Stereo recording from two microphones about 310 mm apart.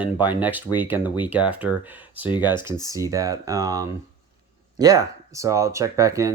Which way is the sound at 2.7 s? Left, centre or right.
Centre.